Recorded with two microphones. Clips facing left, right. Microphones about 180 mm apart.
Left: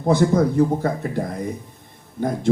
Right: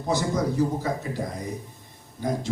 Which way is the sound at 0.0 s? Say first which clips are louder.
Left 8 dB; 55° left (ahead or behind).